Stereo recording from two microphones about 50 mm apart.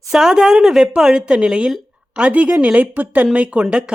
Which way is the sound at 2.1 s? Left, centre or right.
Right.